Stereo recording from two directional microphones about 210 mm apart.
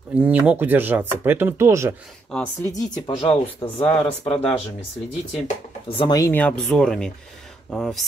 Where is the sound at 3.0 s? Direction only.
25° left (ahead or behind).